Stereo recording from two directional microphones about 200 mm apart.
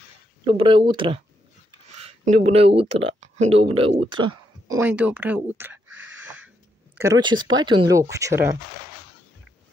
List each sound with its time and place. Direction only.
0.5 s speech: 25° right (ahead or behind)
4.7 s a sound: 10° right (ahead or behind)
7.0 s speech: 20° right (ahead or behind)